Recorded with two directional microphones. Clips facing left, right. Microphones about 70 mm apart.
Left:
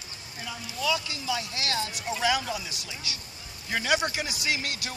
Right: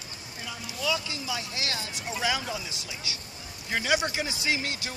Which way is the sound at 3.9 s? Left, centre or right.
Centre.